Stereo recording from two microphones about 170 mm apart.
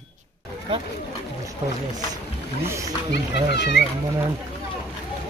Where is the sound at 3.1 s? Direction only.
80° left.